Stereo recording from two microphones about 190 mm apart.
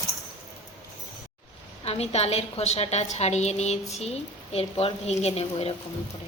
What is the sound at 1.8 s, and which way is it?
A woman's voice, 35° left (ahead or behind).